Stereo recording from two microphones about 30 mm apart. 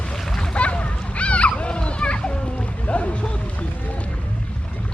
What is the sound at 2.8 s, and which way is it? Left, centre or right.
Boat, left.